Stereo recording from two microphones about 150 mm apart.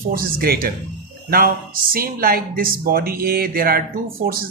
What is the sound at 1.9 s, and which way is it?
Speech, 75° right (ahead or behind).